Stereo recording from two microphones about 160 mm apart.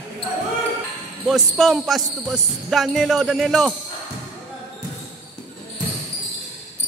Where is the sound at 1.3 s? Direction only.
Centre (ahead or behind).